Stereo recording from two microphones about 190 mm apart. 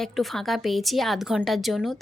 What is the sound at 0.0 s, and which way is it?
A woman's voice, centre (ahead or behind).